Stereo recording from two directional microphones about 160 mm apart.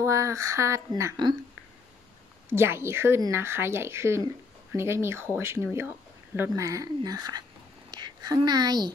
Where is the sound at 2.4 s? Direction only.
15° right (ahead or behind).